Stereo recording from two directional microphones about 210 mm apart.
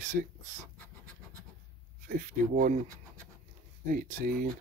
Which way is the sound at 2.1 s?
40° right (ahead or behind).